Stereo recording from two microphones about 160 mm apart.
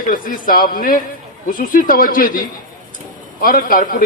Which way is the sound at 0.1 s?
60° left (ahead or behind).